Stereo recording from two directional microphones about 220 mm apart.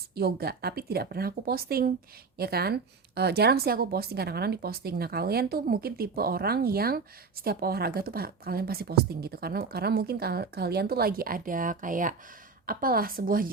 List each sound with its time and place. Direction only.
0.1 s a woman's voice: 45° right (ahead or behind)